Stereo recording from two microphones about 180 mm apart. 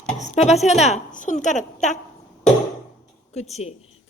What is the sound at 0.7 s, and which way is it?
A woman's voice, 40° left (ahead or behind).